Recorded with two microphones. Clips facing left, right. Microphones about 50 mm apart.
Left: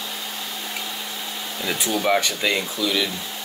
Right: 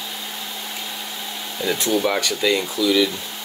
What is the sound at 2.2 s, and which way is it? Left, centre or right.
Speech, left.